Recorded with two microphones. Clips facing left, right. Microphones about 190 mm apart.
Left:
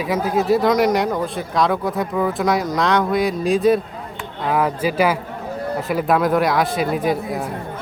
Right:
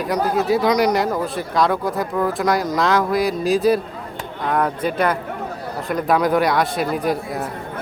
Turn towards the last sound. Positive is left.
turn(degrees=0)  # may be behind; listen again after turning